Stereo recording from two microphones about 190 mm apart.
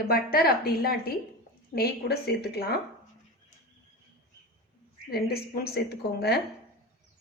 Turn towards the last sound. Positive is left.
turn(degrees=60)  # may be behind; listen again after turning